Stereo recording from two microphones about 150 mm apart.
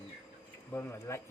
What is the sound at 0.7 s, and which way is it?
Speech, 15° left (ahead or behind).